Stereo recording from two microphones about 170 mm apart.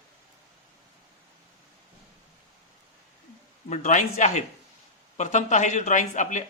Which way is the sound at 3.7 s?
45° left (ahead or behind).